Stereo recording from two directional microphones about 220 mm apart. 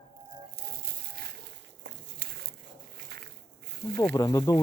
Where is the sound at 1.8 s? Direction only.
50° right (ahead or behind).